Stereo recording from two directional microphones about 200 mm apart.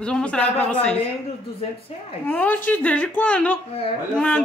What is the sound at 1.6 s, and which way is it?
Speech, 30° left (ahead or behind).